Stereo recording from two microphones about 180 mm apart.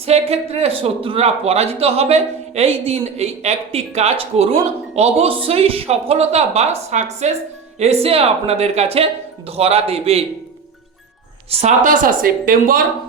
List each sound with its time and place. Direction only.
0.0 s a man's voice: 35° right (ahead or behind)
11.5 s speech: 40° right (ahead or behind)